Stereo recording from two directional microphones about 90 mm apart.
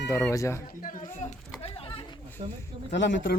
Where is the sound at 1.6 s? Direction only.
85° left.